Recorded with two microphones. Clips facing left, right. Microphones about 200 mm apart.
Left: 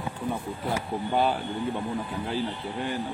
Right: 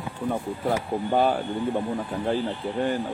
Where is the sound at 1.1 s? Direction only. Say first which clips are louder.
Right 3 dB; 45° right (ahead or behind).